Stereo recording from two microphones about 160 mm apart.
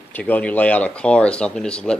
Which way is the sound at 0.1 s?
10° left (ahead or behind).